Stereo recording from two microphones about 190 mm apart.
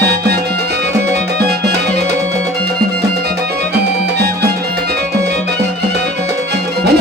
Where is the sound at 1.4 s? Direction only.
60° right (ahead or behind).